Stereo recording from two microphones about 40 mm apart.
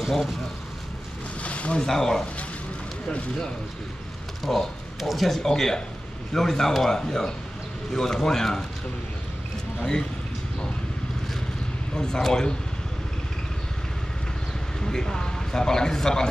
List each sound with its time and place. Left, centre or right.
0.0 s speech: centre
1.4 s boat: left
1.8 s a man's voice: centre
4.4 s a man's voice: centre
11.9 s a man's voice: centre
14.8 s a man's voice: centre